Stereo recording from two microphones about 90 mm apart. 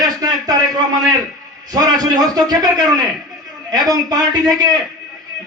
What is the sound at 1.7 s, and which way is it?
A man's voice, 45° right (ahead or behind).